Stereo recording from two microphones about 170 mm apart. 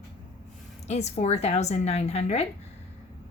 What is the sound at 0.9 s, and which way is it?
A woman's voice, 40° left (ahead or behind).